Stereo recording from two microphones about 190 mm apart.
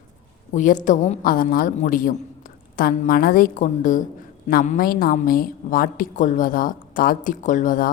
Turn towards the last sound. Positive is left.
turn(degrees=45)  # may be behind; listen again after turning